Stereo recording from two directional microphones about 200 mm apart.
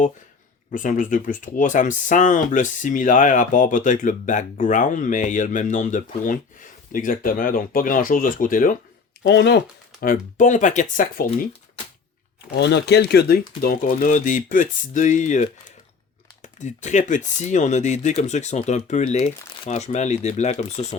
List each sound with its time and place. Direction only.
0.7 s speech: 40° left (ahead or behind)
9.2 s speech: 60° left (ahead or behind)
10.0 s speech: 45° left (ahead or behind)
12.5 s speech: 60° left (ahead or behind); by 20.8 s 35° left (ahead or behind)